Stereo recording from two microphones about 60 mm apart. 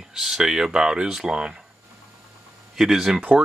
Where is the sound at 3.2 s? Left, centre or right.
Right.